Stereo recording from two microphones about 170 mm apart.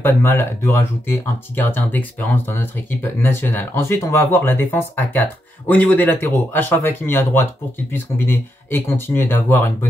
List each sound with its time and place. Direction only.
0.0 s speech: 15° left (ahead or behind)